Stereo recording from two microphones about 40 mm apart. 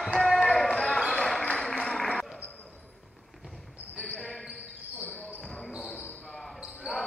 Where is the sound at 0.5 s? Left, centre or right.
Centre.